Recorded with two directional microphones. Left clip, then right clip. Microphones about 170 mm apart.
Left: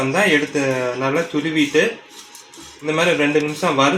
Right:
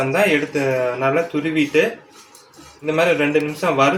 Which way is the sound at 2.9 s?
25° left (ahead or behind).